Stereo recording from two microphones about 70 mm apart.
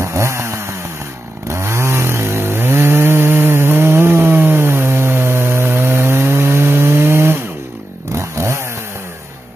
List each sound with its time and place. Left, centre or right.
0.0 s chainsaw: right